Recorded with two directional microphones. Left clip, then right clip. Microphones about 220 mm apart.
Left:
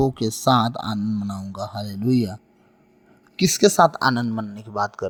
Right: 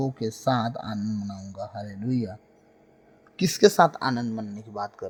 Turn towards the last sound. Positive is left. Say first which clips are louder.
# left 8 dB
turn(degrees=20)  # may be behind; listen again after turning